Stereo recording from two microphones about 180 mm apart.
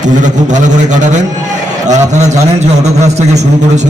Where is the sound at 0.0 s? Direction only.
45° right (ahead or behind).